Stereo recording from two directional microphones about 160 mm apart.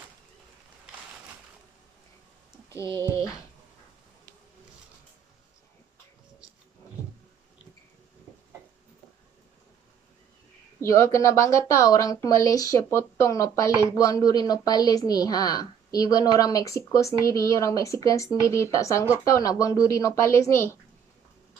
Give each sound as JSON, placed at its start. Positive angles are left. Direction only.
{"t": 2.7, "sound": "speech", "side_deg": 15}
{"t": 10.8, "sound": "speech", "side_deg": 20}